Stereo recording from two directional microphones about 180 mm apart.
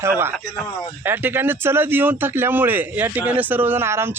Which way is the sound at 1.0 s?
10° right (ahead or behind).